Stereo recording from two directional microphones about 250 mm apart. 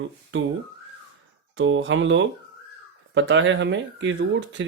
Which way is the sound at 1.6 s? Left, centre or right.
Right.